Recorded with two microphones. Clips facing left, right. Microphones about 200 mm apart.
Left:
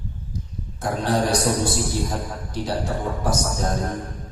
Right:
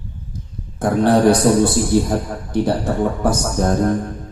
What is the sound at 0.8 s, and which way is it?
A man's voice, 55° right (ahead or behind).